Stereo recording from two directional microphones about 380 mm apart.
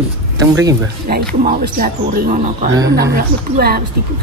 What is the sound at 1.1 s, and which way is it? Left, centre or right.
Speech, right.